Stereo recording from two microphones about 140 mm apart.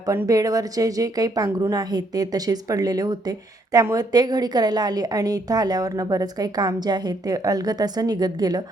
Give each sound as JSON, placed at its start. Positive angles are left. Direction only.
{"t": 0.0, "sound": "a woman's voice", "side_deg": -25}